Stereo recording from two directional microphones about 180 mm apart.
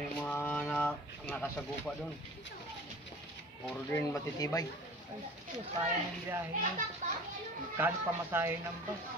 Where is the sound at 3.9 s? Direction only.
15° left (ahead or behind).